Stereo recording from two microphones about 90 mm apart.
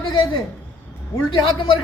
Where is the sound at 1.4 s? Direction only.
70° left (ahead or behind).